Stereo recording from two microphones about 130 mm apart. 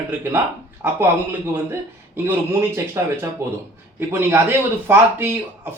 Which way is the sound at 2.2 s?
20° right (ahead or behind).